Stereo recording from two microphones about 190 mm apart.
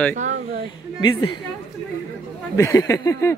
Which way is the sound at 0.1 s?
40° right (ahead or behind).